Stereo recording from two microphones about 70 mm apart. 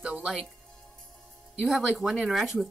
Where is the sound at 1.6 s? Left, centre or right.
Centre.